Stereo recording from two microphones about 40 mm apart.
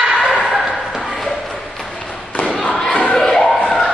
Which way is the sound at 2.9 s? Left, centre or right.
Left.